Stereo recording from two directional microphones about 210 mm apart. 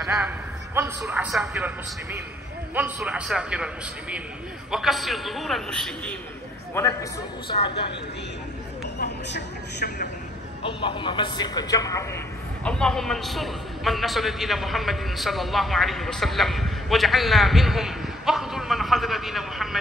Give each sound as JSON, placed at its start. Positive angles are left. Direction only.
{"t": 0.0, "sound": "a man's voice", "side_deg": -5}
{"t": 2.7, "sound": "a man's voice", "side_deg": -10}
{"t": 8.9, "sound": "a man's voice", "side_deg": 55}
{"t": 10.6, "sound": "a man's voice", "side_deg": 25}
{"t": 12.6, "sound": "a man's voice", "side_deg": 5}